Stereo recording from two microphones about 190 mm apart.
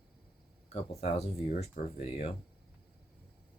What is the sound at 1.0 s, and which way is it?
Speech, 35° left (ahead or behind).